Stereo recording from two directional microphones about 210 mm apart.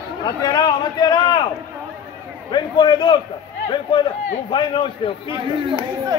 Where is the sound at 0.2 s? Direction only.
20° left (ahead or behind).